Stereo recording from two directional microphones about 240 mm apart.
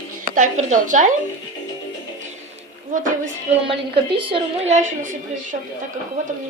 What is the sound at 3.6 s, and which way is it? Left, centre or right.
A woman's voice, right.